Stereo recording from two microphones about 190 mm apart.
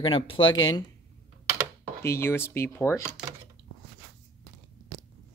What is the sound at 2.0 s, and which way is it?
Speech, 15° left (ahead or behind).